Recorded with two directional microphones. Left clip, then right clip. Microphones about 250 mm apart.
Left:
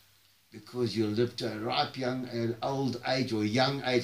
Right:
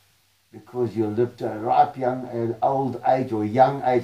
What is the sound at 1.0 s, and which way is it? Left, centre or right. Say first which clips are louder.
Speech: right 6 dB; left.